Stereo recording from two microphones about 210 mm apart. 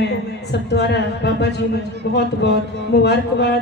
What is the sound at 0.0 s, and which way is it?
Speech, 55° left (ahead or behind).